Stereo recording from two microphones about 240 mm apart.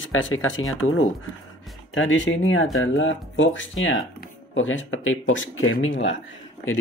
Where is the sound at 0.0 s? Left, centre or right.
Left.